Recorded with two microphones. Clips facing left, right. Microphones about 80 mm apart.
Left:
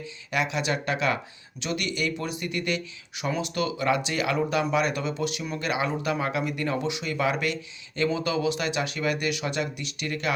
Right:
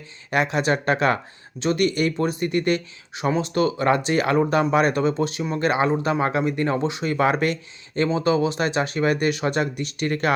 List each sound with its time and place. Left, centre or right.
0.0 s speech: right